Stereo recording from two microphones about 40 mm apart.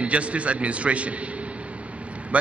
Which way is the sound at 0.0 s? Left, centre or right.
Right.